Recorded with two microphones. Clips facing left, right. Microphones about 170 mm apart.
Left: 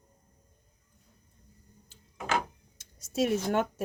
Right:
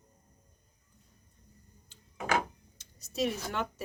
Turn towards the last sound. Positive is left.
turn(degrees=50)  # may be behind; listen again after turning